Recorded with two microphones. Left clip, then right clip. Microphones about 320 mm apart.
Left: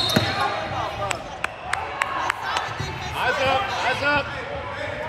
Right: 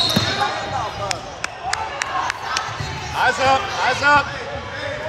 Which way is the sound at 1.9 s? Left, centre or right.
Centre.